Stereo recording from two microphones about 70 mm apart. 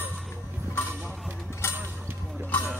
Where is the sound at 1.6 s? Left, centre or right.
Left.